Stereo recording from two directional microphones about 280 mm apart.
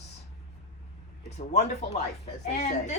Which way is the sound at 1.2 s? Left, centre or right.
Left.